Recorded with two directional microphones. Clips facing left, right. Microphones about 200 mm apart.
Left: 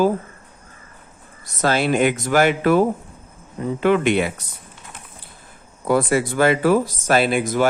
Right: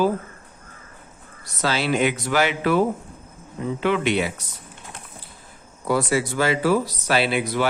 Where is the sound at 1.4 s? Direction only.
50° left (ahead or behind).